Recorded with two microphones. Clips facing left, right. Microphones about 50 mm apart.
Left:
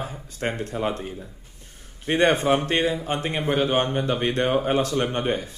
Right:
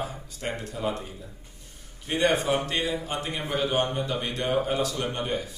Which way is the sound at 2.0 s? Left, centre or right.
Left.